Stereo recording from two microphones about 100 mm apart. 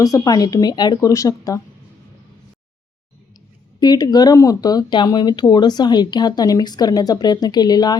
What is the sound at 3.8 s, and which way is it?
Speech, 40° left (ahead or behind).